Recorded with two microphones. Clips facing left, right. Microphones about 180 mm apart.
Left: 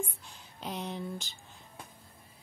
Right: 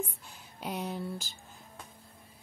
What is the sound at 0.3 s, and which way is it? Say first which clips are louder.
Speech: right 2 dB; 5° right (ahead or behind).